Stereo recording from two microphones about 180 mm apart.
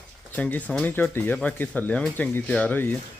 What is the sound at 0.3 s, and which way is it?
A man's voice, 10° left (ahead or behind).